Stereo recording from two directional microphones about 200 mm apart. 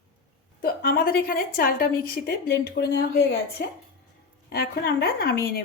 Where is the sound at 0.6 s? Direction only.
50° left (ahead or behind).